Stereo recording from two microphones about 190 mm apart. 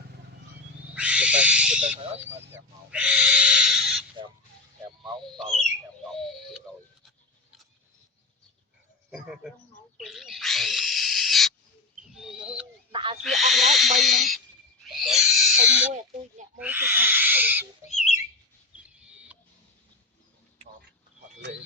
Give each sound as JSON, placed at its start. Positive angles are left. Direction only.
{"t": 0.9, "sound": "owl", "side_deg": -5}
{"t": 2.0, "sound": "speech", "side_deg": -35}
{"t": 2.2, "sound": "speech", "side_deg": -5}
{"t": 5.0, "sound": "speech", "side_deg": 0}
{"t": 10.0, "sound": "owl", "side_deg": 0}
{"t": 12.9, "sound": "owl", "side_deg": -25}
{"t": 13.2, "sound": "speech", "side_deg": 0}
{"t": 14.8, "sound": "owl", "side_deg": 0}
{"t": 16.6, "sound": "speech", "side_deg": -10}
{"t": 17.8, "sound": "bird", "side_deg": 35}
{"t": 18.8, "sound": "owl", "side_deg": -5}